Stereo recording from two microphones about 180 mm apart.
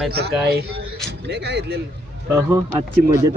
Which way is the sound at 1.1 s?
65° right (ahead or behind).